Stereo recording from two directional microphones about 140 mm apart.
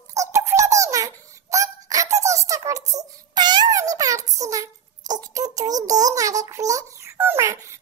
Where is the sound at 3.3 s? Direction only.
30° right (ahead or behind).